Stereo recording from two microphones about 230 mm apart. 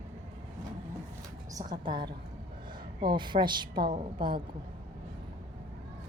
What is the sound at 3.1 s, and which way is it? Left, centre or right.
A woman's voice, centre.